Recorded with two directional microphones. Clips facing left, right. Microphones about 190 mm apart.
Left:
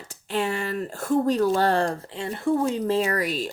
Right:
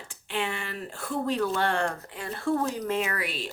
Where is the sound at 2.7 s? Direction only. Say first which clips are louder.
Left 6 dB; 30° left (ahead or behind).